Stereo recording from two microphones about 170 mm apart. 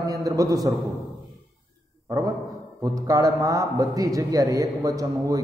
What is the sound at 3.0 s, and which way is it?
A man's voice, 20° right (ahead or behind).